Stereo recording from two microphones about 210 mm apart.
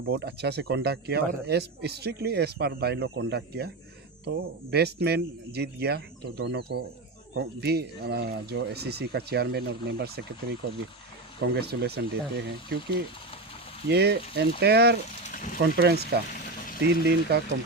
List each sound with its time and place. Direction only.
0.0 s speech: 50° right (ahead or behind)
15.3 s a sound: 40° left (ahead or behind)
15.5 s speech: 50° right (ahead or behind)